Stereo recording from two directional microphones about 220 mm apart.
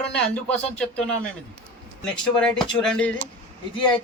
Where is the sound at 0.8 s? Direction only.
5° left (ahead or behind).